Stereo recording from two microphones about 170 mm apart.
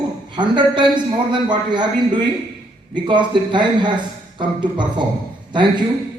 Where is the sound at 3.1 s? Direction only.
25° right (ahead or behind).